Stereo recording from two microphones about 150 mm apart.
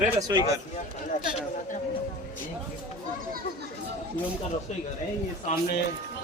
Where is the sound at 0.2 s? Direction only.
25° right (ahead or behind).